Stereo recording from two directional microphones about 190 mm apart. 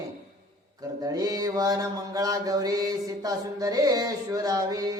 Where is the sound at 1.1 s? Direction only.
20° right (ahead or behind).